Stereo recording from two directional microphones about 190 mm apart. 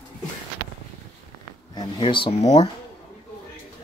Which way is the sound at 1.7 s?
25° left (ahead or behind).